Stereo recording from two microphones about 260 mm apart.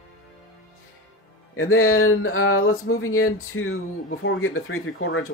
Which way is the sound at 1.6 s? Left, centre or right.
Left.